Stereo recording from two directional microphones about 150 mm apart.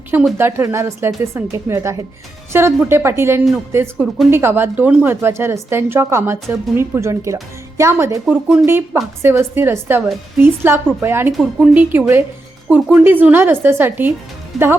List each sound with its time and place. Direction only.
0.1 s speech: 5° right (ahead or behind)
0.3 s a woman's voice: 15° right (ahead or behind)
14.5 s speech: centre (ahead or behind)